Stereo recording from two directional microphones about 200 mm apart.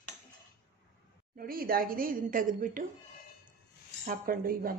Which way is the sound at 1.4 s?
45° right (ahead or behind).